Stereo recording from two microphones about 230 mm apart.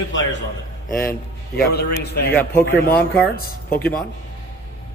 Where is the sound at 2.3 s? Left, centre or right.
Centre.